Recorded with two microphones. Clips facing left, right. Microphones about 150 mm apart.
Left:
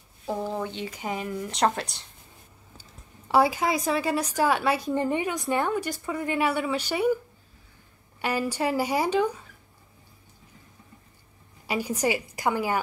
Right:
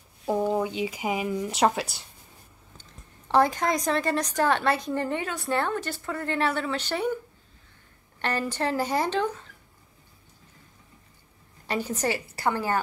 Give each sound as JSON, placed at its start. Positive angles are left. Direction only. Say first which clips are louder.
{"t": 0.3, "sound": "speech", "louder": "right 5 dB", "side_deg": -10}
{"t": 2.8, "sound": "a woman's voice", "louder": "left 1 dB", "side_deg": 10}
{"t": 8.2, "sound": "a woman's voice", "louder": "left 1 dB", "side_deg": 10}
{"t": 11.6, "sound": "a woman's voice", "louder": "left 1 dB", "side_deg": 10}